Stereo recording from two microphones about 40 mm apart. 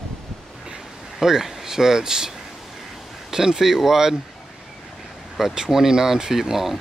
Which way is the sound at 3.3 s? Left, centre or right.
Centre.